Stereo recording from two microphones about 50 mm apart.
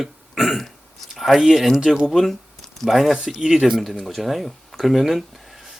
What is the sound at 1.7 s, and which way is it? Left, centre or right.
Speech, centre.